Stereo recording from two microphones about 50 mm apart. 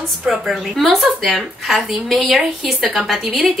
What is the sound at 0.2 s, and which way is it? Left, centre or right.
A woman's voice, centre.